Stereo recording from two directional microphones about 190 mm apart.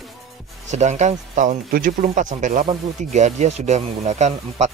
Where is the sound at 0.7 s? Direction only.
35° right (ahead or behind).